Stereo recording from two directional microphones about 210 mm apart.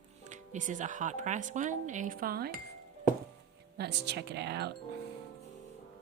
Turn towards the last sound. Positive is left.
turn(degrees=-55)  # may be behind; listen again after turning